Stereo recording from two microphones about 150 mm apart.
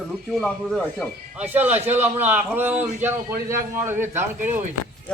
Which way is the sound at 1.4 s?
10° right (ahead or behind).